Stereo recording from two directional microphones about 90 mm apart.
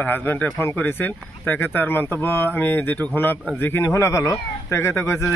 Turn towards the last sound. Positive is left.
turn(degrees=30)  # may be behind; listen again after turning